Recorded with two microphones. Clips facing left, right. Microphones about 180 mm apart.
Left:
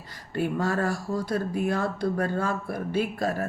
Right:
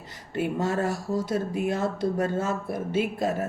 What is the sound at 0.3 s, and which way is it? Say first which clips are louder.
Speech: even; 20° right (ahead or behind).